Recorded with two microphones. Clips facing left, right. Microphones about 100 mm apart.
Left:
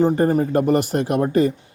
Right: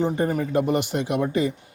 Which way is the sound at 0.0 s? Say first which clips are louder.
Left 6 dB; 40° left (ahead or behind).